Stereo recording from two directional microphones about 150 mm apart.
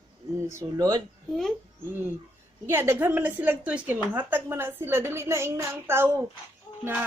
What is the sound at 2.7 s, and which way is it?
A woman's voice, 15° right (ahead or behind).